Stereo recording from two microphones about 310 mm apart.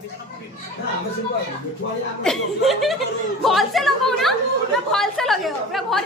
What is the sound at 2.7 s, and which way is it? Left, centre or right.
A woman's voice, centre.